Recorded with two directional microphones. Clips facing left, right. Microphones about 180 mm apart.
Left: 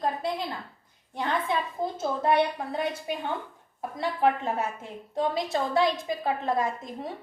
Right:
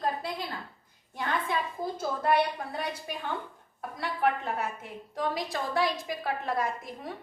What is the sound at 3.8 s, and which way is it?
A woman's voice, 25° left (ahead or behind).